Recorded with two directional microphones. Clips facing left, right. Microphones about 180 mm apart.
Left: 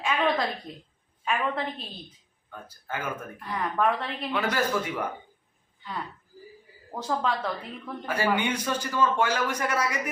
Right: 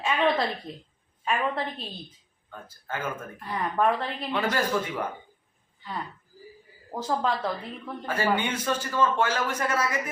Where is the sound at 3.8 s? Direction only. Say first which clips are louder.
Right 1 dB; 15° right (ahead or behind).